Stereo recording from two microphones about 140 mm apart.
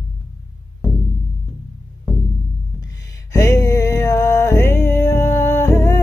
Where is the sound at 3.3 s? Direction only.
20° left (ahead or behind).